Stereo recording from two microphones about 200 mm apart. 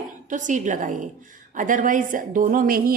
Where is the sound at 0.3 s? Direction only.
40° right (ahead or behind).